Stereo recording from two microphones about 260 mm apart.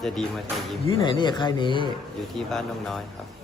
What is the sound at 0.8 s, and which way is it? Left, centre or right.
A man's voice, centre.